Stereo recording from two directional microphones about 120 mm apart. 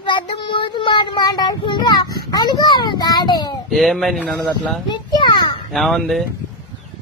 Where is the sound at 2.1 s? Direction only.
35° left (ahead or behind).